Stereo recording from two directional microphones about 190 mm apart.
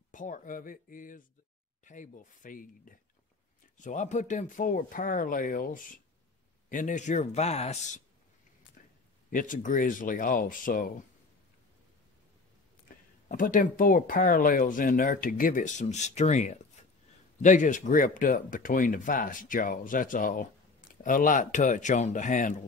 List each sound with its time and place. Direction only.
0.1 s speech: 45° left (ahead or behind)
8.8 s a sound: 45° left (ahead or behind)
9.3 s speech: 45° left (ahead or behind)
13.3 s speech: 45° left (ahead or behind)